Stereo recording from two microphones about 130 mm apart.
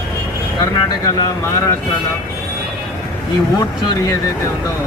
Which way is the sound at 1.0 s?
25° left (ahead or behind).